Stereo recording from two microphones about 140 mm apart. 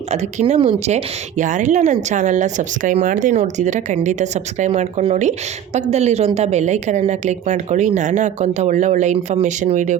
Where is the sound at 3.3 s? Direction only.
55° right (ahead or behind).